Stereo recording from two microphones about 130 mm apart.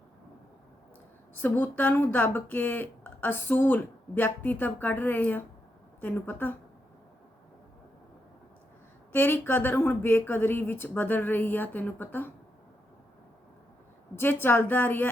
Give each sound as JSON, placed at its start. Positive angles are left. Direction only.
{"t": 1.4, "sound": "speech", "side_deg": 15}
{"t": 9.1, "sound": "speech", "side_deg": 15}
{"t": 14.2, "sound": "speech", "side_deg": 15}